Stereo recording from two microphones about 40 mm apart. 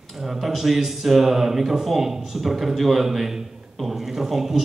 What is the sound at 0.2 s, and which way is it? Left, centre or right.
A man's voice, centre.